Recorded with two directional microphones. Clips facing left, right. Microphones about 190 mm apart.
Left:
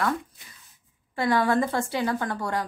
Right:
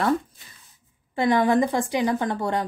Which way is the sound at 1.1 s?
20° right (ahead or behind).